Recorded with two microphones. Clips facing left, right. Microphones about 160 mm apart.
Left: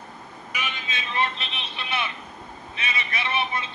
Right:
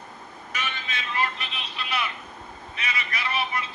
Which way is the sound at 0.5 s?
15° left (ahead or behind).